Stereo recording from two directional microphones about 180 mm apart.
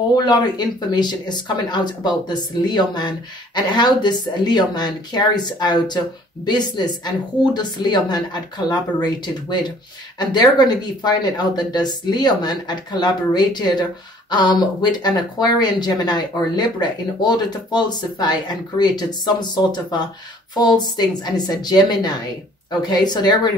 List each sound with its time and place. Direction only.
0.1 s speech: 20° left (ahead or behind)